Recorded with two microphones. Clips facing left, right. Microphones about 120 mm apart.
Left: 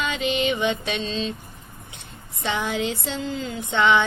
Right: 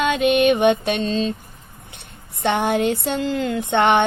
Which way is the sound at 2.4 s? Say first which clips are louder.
Right 6 dB; 65° right (ahead or behind).